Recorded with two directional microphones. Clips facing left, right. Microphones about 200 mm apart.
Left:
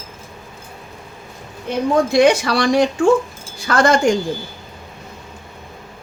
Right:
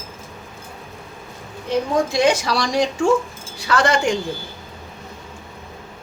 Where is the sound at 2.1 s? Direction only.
60° left (ahead or behind).